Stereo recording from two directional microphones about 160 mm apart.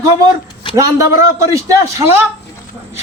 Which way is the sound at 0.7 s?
20° right (ahead or behind).